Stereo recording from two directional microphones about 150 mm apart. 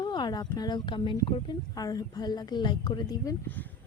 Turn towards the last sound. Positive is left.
turn(degrees=25)  # may be behind; listen again after turning